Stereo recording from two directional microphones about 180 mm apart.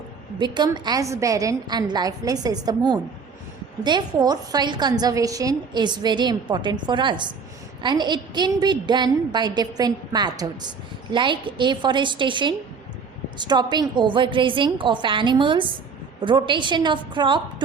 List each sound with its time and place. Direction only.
0.3 s a woman's voice: 25° right (ahead or behind)